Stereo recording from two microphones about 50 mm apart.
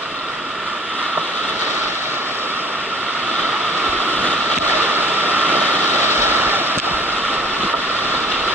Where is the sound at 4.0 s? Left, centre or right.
Right.